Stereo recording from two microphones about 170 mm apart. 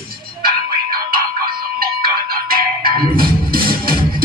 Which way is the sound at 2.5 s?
60° right (ahead or behind).